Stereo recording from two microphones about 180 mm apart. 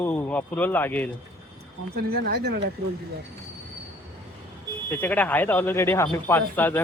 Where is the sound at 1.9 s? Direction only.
60° right (ahead or behind).